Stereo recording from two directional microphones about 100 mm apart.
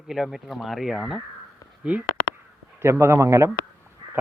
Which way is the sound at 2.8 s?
30° right (ahead or behind).